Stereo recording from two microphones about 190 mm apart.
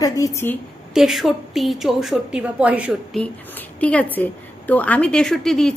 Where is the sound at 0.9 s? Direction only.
Centre (ahead or behind).